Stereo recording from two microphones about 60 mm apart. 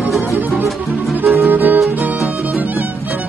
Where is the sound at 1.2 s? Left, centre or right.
Right.